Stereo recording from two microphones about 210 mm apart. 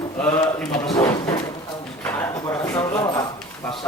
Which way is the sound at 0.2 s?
5° left (ahead or behind).